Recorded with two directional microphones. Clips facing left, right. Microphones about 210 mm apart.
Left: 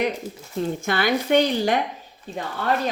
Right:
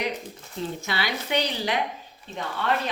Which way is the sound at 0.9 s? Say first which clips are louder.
Left 10 dB; 50° left (ahead or behind).